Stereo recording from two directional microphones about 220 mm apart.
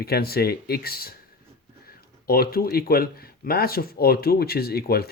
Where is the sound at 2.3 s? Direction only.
45° left (ahead or behind).